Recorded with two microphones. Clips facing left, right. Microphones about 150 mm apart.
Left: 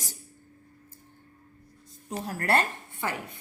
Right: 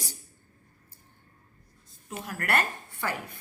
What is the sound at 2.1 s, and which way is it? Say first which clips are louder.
A woman's voice: left 3 dB; 35° left (ahead or behind).